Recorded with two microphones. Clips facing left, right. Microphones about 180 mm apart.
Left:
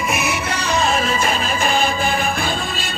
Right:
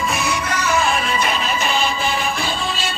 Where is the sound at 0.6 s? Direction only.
35° left (ahead or behind).